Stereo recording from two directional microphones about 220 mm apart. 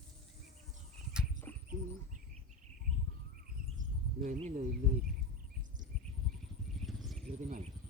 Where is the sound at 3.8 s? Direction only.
35° right (ahead or behind).